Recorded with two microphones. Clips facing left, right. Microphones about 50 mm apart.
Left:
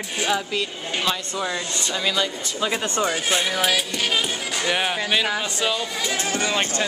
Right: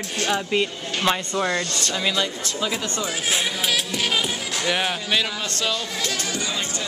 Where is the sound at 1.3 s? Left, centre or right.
Centre.